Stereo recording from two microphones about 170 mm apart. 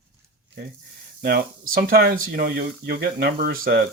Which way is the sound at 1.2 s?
60° right (ahead or behind).